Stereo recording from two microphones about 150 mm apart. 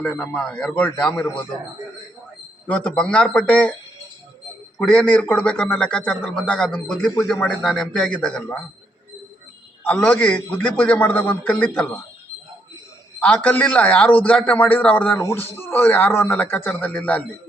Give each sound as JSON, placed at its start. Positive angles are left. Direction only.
{"t": 0.5, "sound": "a man's voice", "side_deg": 5}
{"t": 1.1, "sound": "a man's voice", "side_deg": 20}
{"t": 2.6, "sound": "a man's voice", "side_deg": 5}
{"t": 4.8, "sound": "a man's voice", "side_deg": 5}
{"t": 9.8, "sound": "a man's voice", "side_deg": 10}
{"t": 13.1, "sound": "a man's voice", "side_deg": 10}